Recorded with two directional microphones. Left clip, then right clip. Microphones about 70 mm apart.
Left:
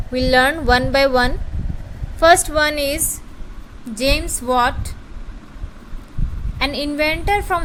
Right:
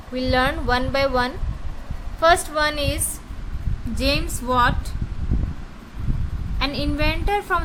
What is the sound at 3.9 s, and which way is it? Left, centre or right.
Speech, left.